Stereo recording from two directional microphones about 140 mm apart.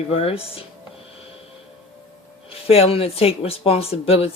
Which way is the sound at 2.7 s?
45° left (ahead or behind).